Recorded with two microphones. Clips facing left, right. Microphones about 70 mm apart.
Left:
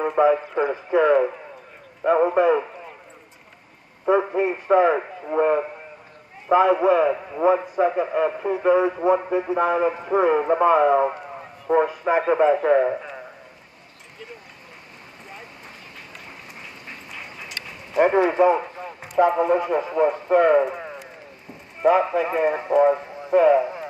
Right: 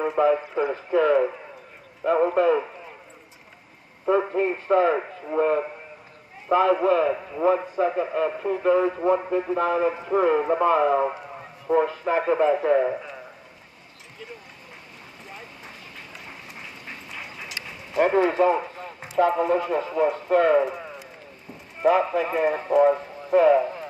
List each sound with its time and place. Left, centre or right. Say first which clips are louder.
0.4 s a man's voice: left 2 dB; centre
4.1 s a man's voice: left 2 dB; centre
16.9 s a sound: even; centre
19.1 s speech: left 2 dB; centre